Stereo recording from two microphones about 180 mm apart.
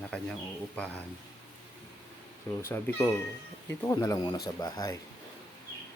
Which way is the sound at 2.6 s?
15° left (ahead or behind).